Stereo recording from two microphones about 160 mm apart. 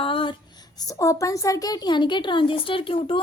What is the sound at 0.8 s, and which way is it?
A woman's voice, 20° left (ahead or behind).